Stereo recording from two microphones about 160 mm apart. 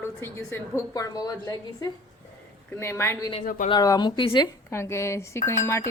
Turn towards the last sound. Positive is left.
turn(degrees=20)  # may be behind; listen again after turning